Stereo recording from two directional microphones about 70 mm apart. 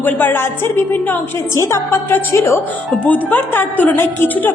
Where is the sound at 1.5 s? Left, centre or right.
Left.